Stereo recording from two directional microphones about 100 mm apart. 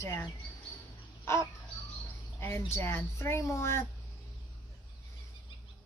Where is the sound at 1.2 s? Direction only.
25° left (ahead or behind).